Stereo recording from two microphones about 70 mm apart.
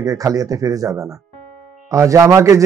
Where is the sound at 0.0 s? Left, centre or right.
Right.